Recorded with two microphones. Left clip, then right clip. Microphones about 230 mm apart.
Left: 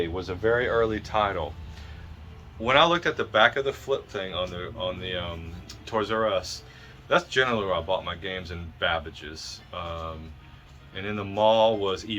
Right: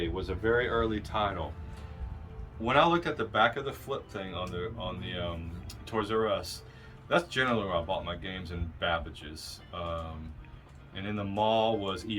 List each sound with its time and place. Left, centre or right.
0.2 s speech: centre
2.6 s speech: centre